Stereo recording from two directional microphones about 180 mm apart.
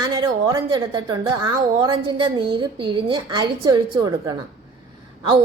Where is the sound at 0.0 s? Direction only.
20° right (ahead or behind).